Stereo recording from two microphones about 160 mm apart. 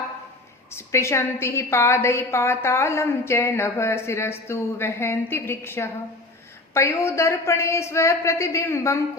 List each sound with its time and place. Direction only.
0.7 s a woman's voice: 15° left (ahead or behind)